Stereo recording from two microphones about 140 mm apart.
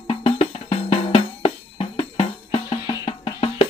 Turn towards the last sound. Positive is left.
turn(degrees=45)  # may be behind; listen again after turning